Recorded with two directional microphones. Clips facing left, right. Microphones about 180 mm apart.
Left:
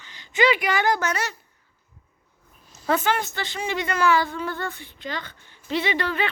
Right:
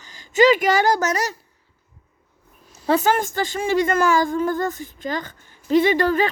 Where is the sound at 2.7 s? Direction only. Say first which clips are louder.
Right 4 dB; 35° right (ahead or behind).